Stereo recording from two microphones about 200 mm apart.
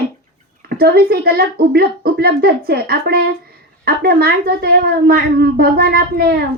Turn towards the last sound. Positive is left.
turn(degrees=-50)  # may be behind; listen again after turning